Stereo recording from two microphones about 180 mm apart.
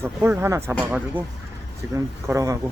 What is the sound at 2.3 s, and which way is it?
Speech, 20° right (ahead or behind).